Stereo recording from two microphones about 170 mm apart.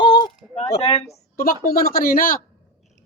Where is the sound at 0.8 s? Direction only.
35° left (ahead or behind).